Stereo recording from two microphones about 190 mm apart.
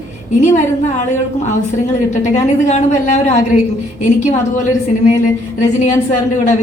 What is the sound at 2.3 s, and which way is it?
A woman's voice, 40° left (ahead or behind).